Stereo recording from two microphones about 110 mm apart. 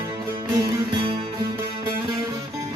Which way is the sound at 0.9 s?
55° right (ahead or behind).